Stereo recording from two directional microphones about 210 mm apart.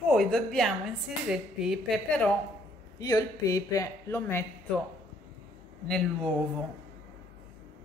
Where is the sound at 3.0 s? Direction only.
15° left (ahead or behind).